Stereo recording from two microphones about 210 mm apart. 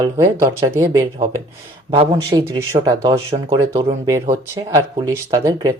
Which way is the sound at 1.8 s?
25° right (ahead or behind).